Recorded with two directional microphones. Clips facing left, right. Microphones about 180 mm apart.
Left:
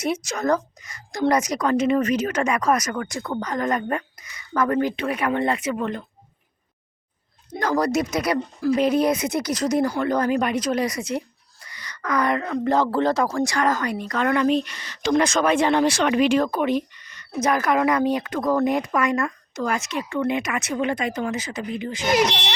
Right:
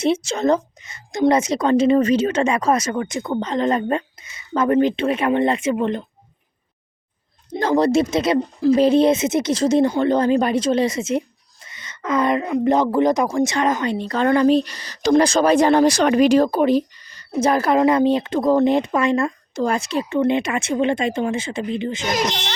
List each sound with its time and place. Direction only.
0.0 s speech: 25° right (ahead or behind)
7.5 s speech: 25° right (ahead or behind)